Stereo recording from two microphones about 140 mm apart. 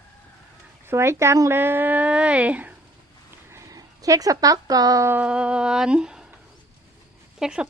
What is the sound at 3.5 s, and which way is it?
Speech, 25° right (ahead or behind).